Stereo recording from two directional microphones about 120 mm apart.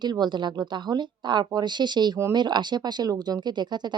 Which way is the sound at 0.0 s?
35° right (ahead or behind).